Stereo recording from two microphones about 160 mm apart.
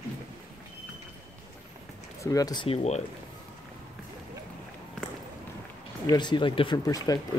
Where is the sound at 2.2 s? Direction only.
20° left (ahead or behind).